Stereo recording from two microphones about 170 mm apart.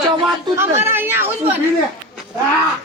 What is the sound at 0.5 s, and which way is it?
Speech, 15° right (ahead or behind).